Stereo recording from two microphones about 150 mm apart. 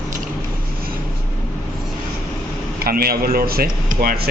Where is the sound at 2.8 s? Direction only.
80° right.